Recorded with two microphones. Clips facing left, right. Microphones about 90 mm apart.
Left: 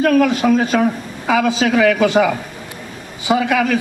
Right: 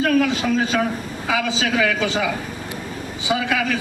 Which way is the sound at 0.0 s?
50° left (ahead or behind).